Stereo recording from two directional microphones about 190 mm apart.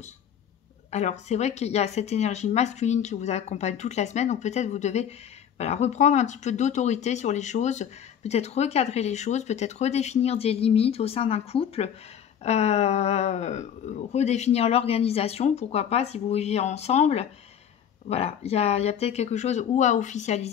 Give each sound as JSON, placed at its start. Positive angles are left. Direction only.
{"t": 0.9, "sound": "speech", "side_deg": 35}